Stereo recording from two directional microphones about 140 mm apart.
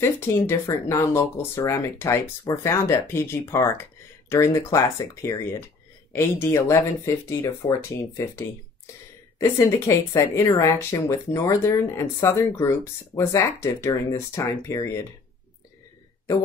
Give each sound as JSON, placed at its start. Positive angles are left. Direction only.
{"t": 0.0, "sound": "a woman's voice", "side_deg": 20}
{"t": 9.4, "sound": "a woman's voice", "side_deg": 20}